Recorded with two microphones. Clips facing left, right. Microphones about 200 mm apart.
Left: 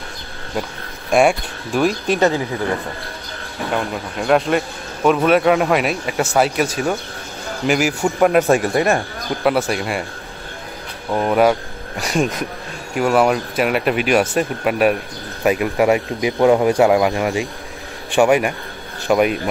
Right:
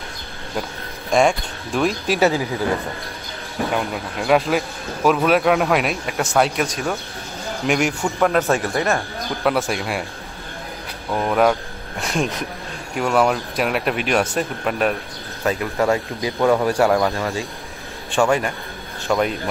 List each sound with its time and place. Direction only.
1.1 s speech: 5° left (ahead or behind)
3.7 s speech: centre (ahead or behind)
11.1 s speech: 10° left (ahead or behind)